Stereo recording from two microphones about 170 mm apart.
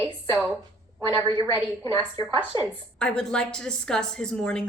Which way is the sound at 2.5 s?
20° left (ahead or behind).